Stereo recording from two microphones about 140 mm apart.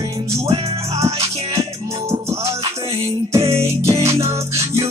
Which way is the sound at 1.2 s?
45° right (ahead or behind).